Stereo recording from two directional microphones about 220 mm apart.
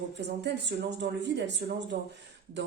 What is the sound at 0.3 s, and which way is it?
Speech, 50° right (ahead or behind).